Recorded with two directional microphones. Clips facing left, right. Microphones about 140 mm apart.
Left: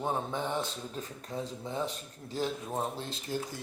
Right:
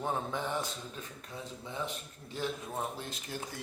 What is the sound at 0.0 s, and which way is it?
Speech, 20° left (ahead or behind).